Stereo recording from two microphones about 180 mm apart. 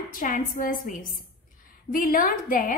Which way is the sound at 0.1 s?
50° left (ahead or behind).